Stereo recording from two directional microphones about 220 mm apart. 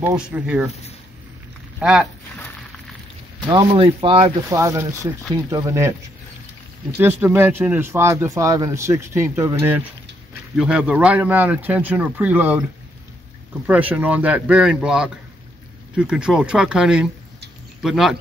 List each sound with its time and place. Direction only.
0.0 s speech: 10° right (ahead or behind)
1.8 s speech: 5° right (ahead or behind)
3.4 s speech: 20° right (ahead or behind)
4.6 s speech: 10° right (ahead or behind)
7.0 s speech: 10° right (ahead or behind)
13.7 s speech: 5° right (ahead or behind)